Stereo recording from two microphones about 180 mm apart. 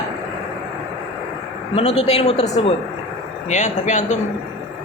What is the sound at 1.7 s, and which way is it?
A man's voice, 35° left (ahead or behind).